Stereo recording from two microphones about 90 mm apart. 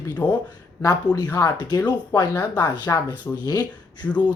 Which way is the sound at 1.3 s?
45° left (ahead or behind).